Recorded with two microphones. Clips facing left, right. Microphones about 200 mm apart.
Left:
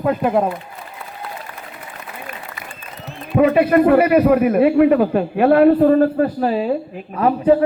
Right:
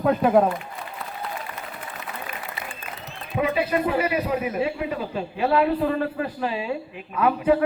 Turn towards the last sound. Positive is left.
turn(degrees=35)  # may be behind; listen again after turning